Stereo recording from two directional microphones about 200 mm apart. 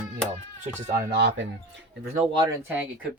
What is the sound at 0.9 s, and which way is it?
Speech, 55° right (ahead or behind).